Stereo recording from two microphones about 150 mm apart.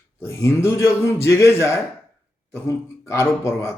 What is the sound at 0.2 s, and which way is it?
Speech, 20° left (ahead or behind).